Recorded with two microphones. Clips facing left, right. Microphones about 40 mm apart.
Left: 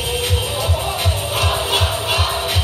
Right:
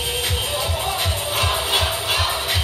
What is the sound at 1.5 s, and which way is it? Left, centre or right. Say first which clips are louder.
Crowd: left 2 dB; centre.